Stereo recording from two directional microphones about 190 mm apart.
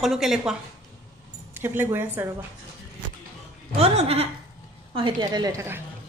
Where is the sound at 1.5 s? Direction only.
10° right (ahead or behind).